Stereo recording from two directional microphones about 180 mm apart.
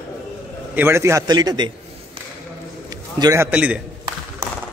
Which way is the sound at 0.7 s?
15° right (ahead or behind).